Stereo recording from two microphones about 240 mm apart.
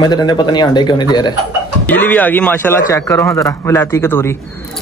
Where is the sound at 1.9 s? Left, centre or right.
Centre.